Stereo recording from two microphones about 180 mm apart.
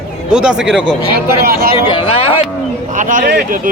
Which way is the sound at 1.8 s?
30° left (ahead or behind).